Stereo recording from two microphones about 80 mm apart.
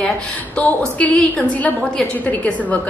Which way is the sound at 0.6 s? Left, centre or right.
Centre.